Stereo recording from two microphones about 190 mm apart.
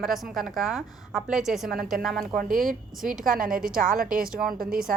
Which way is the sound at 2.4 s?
45° right (ahead or behind).